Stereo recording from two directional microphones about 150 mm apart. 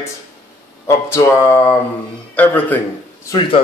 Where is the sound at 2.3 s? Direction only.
10° left (ahead or behind).